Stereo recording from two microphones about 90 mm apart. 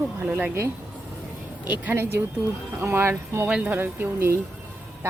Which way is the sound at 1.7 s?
20° right (ahead or behind).